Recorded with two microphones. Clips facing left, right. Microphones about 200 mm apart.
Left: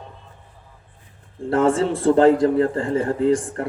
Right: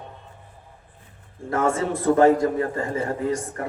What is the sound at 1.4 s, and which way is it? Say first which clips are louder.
A man's voice: left 5 dB; 30° left (ahead or behind).